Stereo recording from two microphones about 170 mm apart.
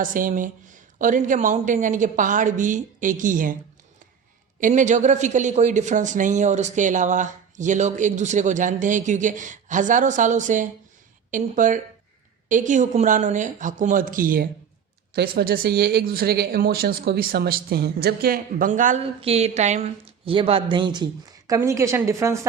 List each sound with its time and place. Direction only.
0.0 s speech: 55° right (ahead or behind)
4.6 s speech: 45° right (ahead or behind)
19.2 s a woman's voice: 40° right (ahead or behind); by 22.4 s 15° right (ahead or behind)